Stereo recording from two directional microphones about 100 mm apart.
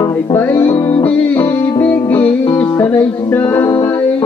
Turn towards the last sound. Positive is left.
turn(degrees=20)  # may be behind; listen again after turning